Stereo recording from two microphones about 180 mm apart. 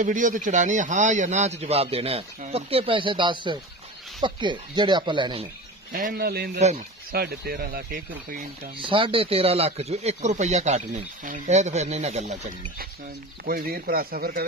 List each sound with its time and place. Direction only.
0.0 s speech: 45° right (ahead or behind); by 5.5 s 30° right (ahead or behind)
5.9 s speech: 50° right (ahead or behind)
8.7 s speech: 30° right (ahead or behind)
13.5 s speech: 55° right (ahead or behind)